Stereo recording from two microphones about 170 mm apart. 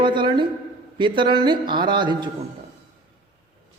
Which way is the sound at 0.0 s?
30° right (ahead or behind).